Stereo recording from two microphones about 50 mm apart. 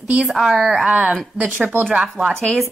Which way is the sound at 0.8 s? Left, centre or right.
Right.